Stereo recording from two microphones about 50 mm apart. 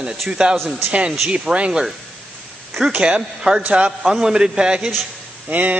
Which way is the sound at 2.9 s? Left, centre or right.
Right.